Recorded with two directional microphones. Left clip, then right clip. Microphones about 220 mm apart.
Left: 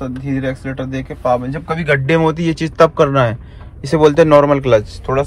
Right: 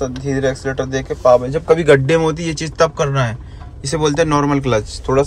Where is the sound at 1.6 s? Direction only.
25° right (ahead or behind).